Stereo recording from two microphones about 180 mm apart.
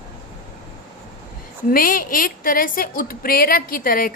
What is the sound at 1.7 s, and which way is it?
A woman's voice, 50° left (ahead or behind).